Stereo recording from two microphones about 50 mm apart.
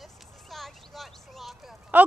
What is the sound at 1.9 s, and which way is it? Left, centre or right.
Speech, right.